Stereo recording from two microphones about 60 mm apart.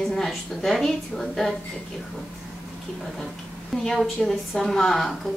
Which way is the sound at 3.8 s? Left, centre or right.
Centre.